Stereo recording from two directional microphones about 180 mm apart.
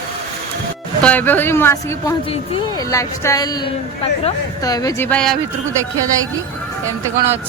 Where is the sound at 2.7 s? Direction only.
20° left (ahead or behind).